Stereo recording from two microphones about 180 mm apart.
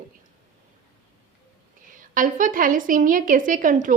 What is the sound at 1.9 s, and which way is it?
A woman's voice, 45° right (ahead or behind).